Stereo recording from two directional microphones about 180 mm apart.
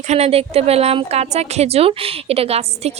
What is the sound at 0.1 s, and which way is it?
A woman's voice, 35° right (ahead or behind).